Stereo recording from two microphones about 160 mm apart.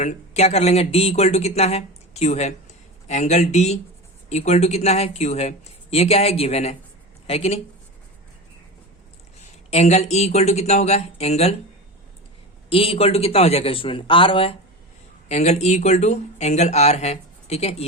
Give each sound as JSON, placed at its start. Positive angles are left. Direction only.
{"t": 0.0, "sound": "a man's voice", "side_deg": 45}
{"t": 9.6, "sound": "speech", "side_deg": 45}
{"t": 12.7, "sound": "a man's voice", "side_deg": 40}
{"t": 15.3, "sound": "speech", "side_deg": 45}